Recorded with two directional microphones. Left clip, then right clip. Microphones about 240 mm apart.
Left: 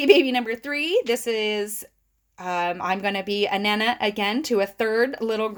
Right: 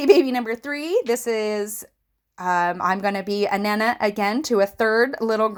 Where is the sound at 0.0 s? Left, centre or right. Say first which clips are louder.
Right 1 dB; centre.